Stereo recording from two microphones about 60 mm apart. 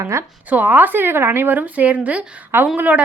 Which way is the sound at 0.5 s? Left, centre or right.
Right.